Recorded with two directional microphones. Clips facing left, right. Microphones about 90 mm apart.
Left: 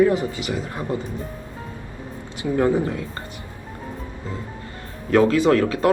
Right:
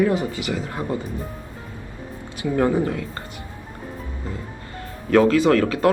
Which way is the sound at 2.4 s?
25° left (ahead or behind).